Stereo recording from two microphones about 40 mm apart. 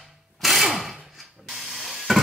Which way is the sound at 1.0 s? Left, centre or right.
Centre.